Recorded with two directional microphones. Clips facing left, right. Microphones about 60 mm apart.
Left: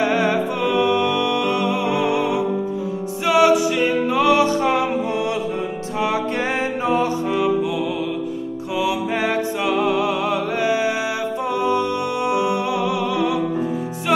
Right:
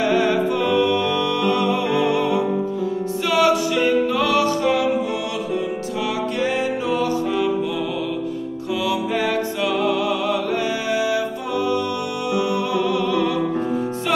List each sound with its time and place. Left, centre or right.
0.5 s music: centre; by 7.1 s left
8.7 s music: left
12.7 s music: centre